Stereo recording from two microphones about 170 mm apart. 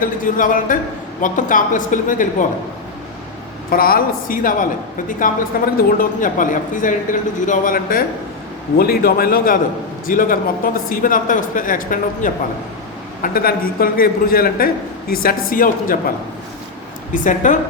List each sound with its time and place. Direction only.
0.0 s speech: 50° left (ahead or behind)
3.7 s speech: 60° left (ahead or behind)
17.2 s speech: 50° left (ahead or behind)